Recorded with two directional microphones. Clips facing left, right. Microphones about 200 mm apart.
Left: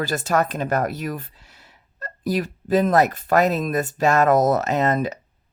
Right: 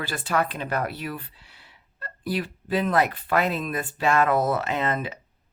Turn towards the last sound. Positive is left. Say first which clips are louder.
# left 6 dB
turn(degrees=40)  # may be behind; listen again after turning